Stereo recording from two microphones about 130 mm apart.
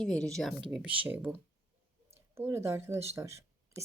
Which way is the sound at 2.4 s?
20° right (ahead or behind).